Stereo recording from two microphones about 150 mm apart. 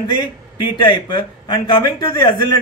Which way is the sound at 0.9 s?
30° left (ahead or behind).